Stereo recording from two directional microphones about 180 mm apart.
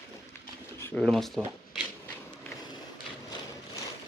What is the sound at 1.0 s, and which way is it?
Speech, centre (ahead or behind).